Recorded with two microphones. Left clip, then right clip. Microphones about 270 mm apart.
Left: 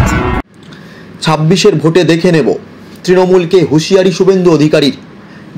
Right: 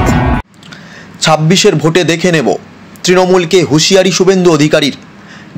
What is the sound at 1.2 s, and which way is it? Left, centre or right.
A man's voice, right.